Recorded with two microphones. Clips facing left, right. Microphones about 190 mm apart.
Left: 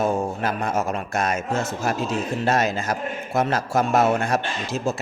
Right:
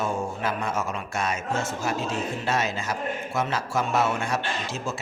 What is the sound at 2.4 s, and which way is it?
A man's voice, 40° left (ahead or behind).